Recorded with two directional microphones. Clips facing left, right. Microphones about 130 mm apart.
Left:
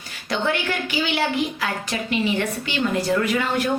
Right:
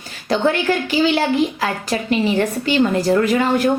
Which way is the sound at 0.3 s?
35° right (ahead or behind).